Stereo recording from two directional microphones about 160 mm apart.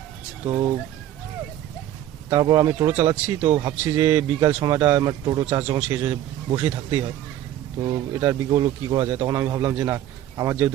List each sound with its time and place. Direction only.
0.4 s speech: 20° right (ahead or behind)
2.3 s speech: 25° right (ahead or behind)
3.4 s speech: 30° right (ahead or behind)
7.8 s speech: 30° right (ahead or behind)